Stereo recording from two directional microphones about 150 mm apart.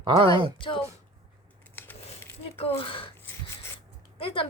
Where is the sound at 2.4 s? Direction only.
40° left (ahead or behind).